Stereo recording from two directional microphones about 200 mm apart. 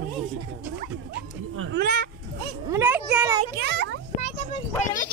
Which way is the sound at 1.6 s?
55° right (ahead or behind).